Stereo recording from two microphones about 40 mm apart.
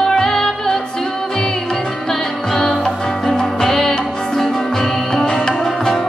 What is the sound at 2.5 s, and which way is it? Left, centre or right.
Music, centre.